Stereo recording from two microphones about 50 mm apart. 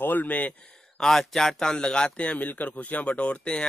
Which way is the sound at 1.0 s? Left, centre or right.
Centre.